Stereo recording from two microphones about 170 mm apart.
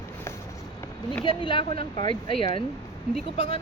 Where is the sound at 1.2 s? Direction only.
30° left (ahead or behind).